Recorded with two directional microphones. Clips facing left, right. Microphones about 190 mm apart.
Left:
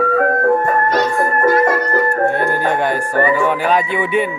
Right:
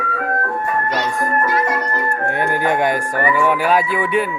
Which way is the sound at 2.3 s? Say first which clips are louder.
Left 1 dB; 15° right (ahead or behind).